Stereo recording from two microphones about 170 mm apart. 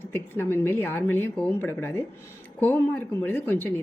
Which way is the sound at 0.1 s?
10° left (ahead or behind).